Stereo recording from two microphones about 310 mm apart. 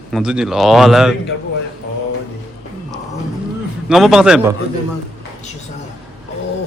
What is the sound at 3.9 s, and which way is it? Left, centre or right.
Speech, centre.